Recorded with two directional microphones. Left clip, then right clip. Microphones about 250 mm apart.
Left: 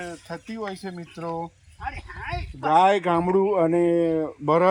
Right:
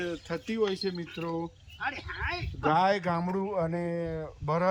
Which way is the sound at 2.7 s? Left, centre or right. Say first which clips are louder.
Left 7 dB; left.